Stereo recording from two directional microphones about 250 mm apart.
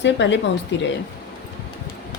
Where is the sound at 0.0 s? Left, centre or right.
Left.